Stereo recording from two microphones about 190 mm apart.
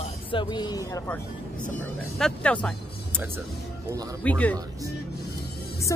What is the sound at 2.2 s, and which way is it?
Speech, 5° left (ahead or behind).